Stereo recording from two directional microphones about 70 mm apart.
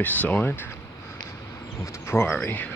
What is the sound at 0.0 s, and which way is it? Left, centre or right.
Speech, left.